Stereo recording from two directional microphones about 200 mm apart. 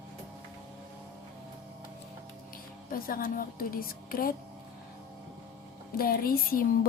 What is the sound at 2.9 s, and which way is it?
A woman's voice, 45° left (ahead or behind).